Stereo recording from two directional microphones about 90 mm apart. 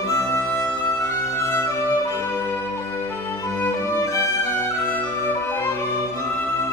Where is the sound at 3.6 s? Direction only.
30° left (ahead or behind).